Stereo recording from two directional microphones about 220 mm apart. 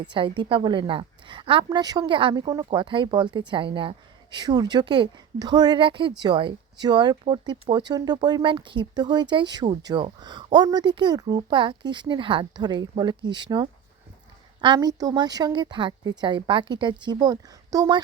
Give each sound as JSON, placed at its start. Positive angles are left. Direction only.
{"t": 0.0, "sound": "a woman's voice", "side_deg": -20}